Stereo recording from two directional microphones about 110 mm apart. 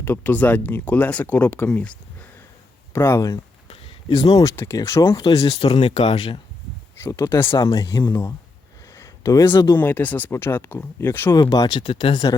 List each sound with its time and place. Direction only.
0.0 s speech: 20° left (ahead or behind)
2.9 s speech: 25° left (ahead or behind)
3.7 s a sound: 55° left (ahead or behind)
4.4 s speech: 25° left (ahead or behind)
5.5 s speech: 65° left (ahead or behind)
7.0 s speech: 25° left (ahead or behind)
7.6 s speech: 35° left (ahead or behind)
8.0 s speech: 20° left (ahead or behind)
9.0 s a sound: 30° left (ahead or behind)
9.7 s speech: 15° left (ahead or behind)
11.3 s speech: 35° left (ahead or behind)
11.8 s speech: 50° left (ahead or behind)